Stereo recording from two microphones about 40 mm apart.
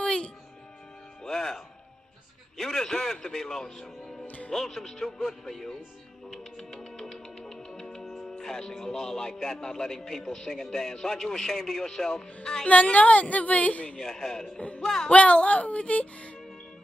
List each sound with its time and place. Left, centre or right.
1.2 s music: centre
2.5 s a man's voice: centre
6.3 s music: centre
8.0 s music: centre
8.3 s a man's voice: centre
12.6 s speech: left
13.9 s a man's voice: centre
15.0 s speech: left